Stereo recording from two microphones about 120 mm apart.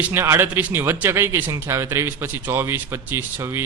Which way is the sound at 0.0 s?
20° right (ahead or behind).